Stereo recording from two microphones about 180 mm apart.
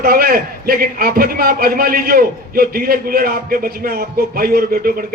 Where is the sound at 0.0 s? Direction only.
55° right (ahead or behind).